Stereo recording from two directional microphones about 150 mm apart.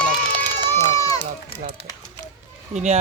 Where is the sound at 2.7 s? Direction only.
50° right (ahead or behind).